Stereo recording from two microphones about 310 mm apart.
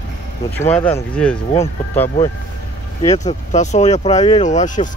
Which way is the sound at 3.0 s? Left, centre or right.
Left.